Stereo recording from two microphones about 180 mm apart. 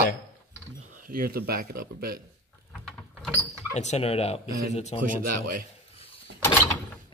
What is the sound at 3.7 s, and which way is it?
Speech, 40° left (ahead or behind).